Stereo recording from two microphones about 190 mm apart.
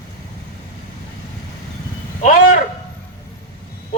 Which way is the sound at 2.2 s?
40° left (ahead or behind).